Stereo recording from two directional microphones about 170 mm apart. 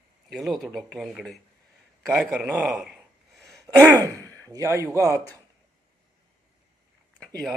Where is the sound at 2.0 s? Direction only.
Centre (ahead or behind).